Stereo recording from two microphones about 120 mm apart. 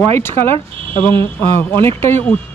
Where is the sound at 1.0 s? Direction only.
15° left (ahead or behind).